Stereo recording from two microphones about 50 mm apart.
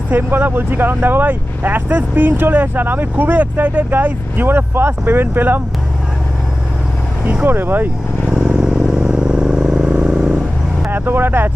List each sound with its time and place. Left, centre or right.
0.1 s speech: right
7.4 s speech: right
8.4 s vehicle: centre
10.9 s speech: right